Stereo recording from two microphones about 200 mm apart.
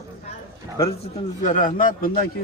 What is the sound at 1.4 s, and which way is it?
Speech, 40° left (ahead or behind).